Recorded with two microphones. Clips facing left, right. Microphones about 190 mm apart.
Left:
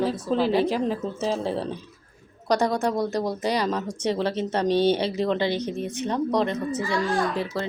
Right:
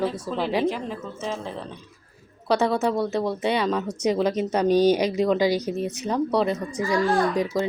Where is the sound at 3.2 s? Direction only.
40° left (ahead or behind).